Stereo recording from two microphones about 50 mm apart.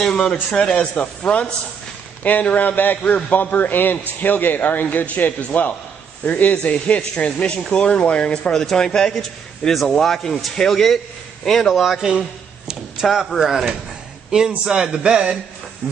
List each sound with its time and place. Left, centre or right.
0.0 s a man's voice: centre
8.5 s a man's voice: centre
11.8 s a man's voice: centre
12.1 s a sound: centre
13.0 s a man's voice: centre